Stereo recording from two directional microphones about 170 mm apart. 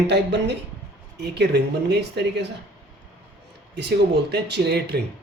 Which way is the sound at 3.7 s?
80° right.